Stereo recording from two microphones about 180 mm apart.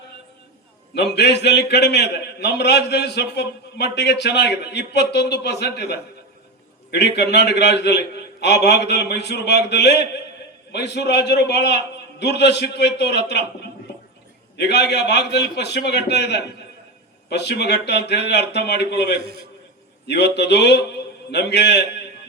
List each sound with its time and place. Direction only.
0.9 s a man's voice: 70° left (ahead or behind)